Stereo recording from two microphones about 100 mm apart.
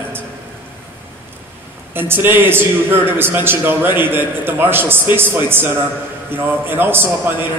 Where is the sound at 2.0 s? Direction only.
20° right (ahead or behind).